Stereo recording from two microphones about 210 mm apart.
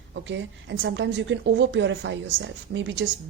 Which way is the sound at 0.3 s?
60° right (ahead or behind).